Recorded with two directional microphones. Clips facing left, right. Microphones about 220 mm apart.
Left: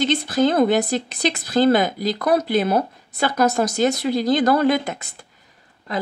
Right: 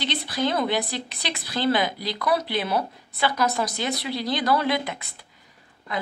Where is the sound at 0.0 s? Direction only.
45° left (ahead or behind).